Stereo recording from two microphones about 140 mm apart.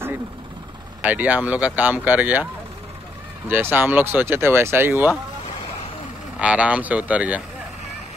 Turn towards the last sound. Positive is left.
turn(degrees=-10)  # may be behind; listen again after turning